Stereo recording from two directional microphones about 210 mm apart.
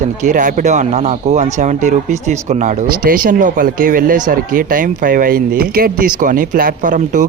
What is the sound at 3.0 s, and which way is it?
Speech, 40° right (ahead or behind).